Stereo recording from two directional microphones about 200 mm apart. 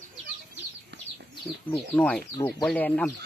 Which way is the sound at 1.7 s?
5° left (ahead or behind).